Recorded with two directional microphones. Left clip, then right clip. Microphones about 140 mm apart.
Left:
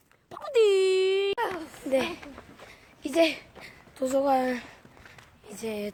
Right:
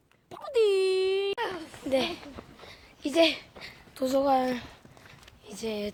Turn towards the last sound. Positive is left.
turn(degrees=-5)  # may be behind; listen again after turning